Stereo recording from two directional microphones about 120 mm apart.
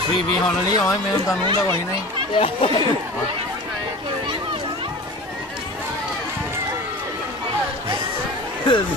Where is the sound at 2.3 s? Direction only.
50° left (ahead or behind).